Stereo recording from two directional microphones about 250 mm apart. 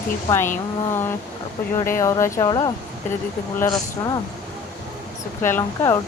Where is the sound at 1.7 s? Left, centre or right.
Centre.